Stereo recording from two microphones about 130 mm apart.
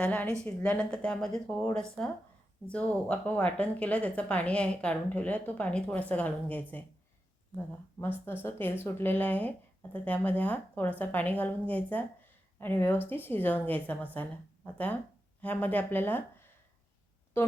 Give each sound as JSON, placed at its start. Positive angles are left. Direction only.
{"t": 0.0, "sound": "speech", "side_deg": 10}